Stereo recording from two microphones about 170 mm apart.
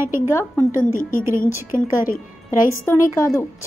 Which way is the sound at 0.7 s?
50° left (ahead or behind).